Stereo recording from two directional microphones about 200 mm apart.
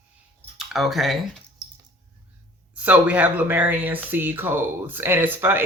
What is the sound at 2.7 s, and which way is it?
Speech, 5° right (ahead or behind).